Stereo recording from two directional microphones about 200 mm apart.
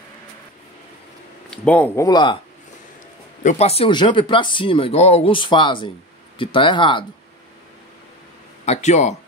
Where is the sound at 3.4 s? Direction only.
30° left (ahead or behind).